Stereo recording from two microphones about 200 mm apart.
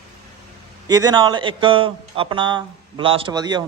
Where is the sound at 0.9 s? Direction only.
20° right (ahead or behind).